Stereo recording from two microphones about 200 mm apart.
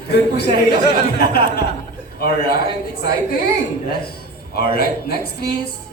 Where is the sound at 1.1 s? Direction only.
50° left (ahead or behind).